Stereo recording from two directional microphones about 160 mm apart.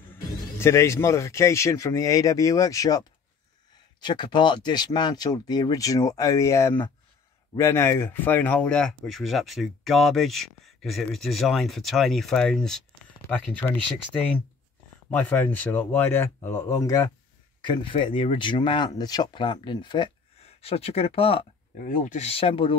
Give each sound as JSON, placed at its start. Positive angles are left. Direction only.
{"t": 0.1, "sound": "speech", "side_deg": 15}
{"t": 17.6, "sound": "speech", "side_deg": 30}
{"t": 20.6, "sound": "speech", "side_deg": 40}
{"t": 21.7, "sound": "speech", "side_deg": 55}